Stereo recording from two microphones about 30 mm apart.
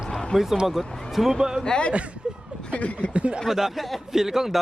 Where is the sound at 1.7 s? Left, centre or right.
Left.